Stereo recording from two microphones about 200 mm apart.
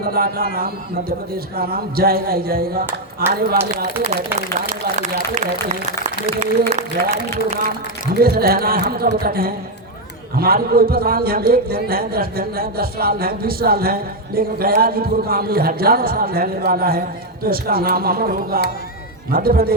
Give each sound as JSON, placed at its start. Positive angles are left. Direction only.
{"t": 0.0, "sound": "a man's voice", "side_deg": -50}
{"t": 1.5, "sound": "a man's voice", "side_deg": -50}
{"t": 4.9, "sound": "a man's voice", "side_deg": -35}
{"t": 8.1, "sound": "a man's voice", "side_deg": -50}